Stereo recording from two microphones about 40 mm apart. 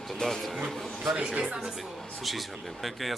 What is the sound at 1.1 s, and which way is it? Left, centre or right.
Speech, right.